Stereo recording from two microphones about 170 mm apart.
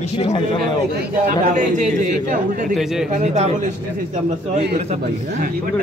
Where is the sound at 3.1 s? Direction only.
40° right (ahead or behind).